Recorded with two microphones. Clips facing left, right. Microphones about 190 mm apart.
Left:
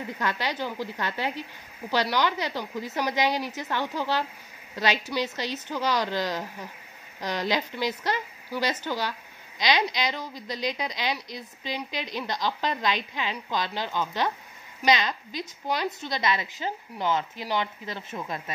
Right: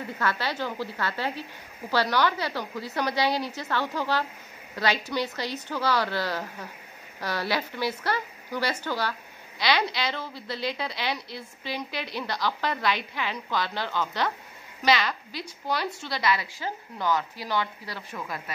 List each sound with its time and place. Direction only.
0.0 s a woman's voice: 15° left (ahead or behind)